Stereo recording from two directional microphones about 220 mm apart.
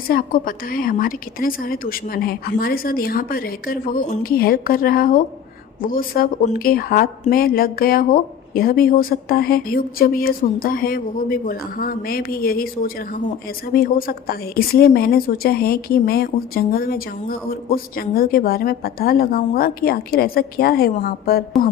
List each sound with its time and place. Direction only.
0.1 s a woman's voice: 40° left (ahead or behind)